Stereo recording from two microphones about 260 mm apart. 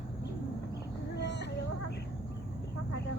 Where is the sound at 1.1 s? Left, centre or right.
Left.